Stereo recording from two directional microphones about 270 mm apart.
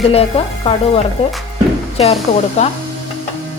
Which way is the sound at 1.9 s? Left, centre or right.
Left.